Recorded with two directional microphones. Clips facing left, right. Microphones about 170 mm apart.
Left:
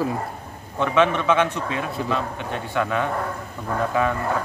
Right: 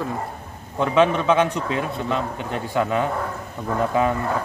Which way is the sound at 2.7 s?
25° right (ahead or behind).